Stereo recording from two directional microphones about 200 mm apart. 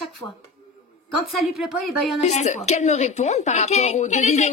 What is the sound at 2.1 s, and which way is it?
A woman's voice, 35° left (ahead or behind).